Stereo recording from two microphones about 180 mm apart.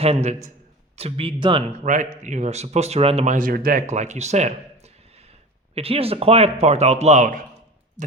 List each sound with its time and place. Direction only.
0.0 s speech: 35° right (ahead or behind)
1.8 s speech: 45° right (ahead or behind)
3.3 s speech: 50° right (ahead or behind)